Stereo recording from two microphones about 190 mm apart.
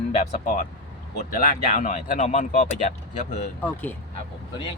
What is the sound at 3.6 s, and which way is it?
Speech, 10° left (ahead or behind).